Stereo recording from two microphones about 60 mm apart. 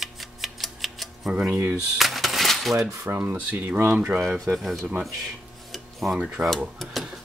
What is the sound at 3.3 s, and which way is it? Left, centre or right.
Speech, right.